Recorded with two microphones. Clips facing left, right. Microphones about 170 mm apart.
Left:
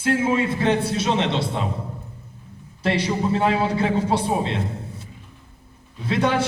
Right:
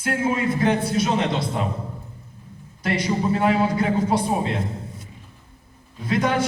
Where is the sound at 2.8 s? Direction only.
30° left (ahead or behind).